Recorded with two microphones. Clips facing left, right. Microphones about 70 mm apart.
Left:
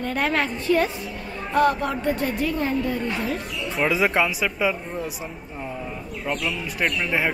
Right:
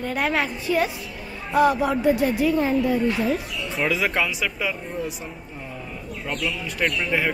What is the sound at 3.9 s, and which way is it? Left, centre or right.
Speech, centre.